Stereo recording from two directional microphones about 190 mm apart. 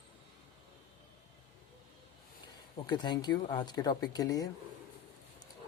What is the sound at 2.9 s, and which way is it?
Speech, 20° left (ahead or behind).